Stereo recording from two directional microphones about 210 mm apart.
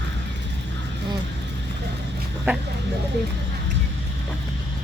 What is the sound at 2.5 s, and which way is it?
Speech, 10° right (ahead or behind).